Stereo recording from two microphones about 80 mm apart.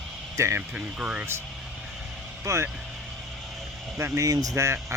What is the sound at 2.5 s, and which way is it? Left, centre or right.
Speech, right.